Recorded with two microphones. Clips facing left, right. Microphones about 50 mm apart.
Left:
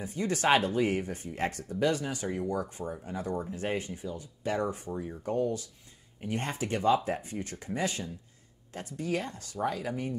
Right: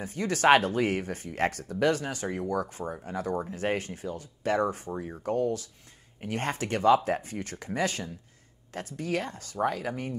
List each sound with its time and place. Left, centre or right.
0.0 s speech: right
3.5 s speech: right
4.9 s speech: right
5.3 s speech: right